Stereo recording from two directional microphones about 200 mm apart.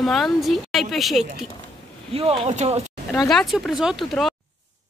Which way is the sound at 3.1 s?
Centre (ahead or behind).